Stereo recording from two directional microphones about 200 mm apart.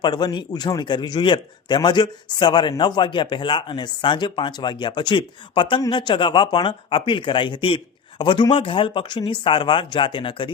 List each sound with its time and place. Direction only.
0.0 s a man's voice: 20° left (ahead or behind)